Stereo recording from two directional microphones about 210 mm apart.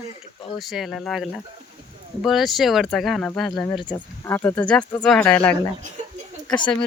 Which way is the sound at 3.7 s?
20° left (ahead or behind).